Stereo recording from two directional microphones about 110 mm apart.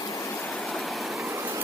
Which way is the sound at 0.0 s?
30° left (ahead or behind).